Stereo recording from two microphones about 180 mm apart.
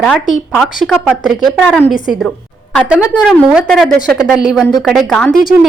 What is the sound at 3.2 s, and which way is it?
A woman's voice, centre (ahead or behind).